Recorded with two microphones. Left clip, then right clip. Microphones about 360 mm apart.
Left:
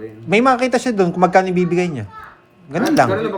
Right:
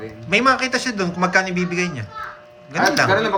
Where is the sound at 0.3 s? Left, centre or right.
Centre.